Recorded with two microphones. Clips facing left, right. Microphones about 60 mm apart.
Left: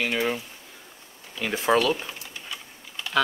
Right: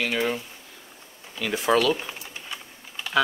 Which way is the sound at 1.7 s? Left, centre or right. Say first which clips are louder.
Even; left.